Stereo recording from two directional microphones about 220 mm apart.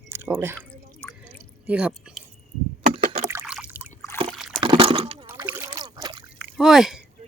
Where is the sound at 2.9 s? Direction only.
40° right (ahead or behind).